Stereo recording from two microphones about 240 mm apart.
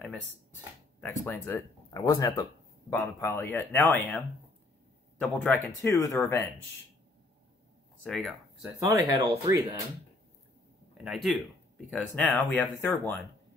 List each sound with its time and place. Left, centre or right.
1.0 s speech: centre
5.2 s speech: centre
8.0 s speech: centre
8.7 s speech: centre
11.1 s speech: centre